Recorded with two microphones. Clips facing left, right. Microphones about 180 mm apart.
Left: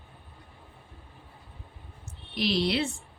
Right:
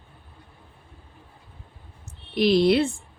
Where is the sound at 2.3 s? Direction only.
50° right (ahead or behind).